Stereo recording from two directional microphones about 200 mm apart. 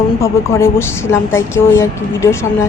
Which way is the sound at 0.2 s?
15° left (ahead or behind).